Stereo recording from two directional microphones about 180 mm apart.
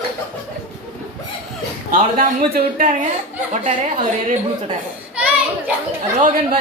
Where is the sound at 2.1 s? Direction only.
50° right (ahead or behind).